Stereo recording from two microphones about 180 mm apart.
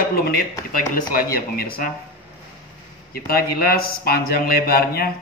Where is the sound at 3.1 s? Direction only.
55° left (ahead or behind).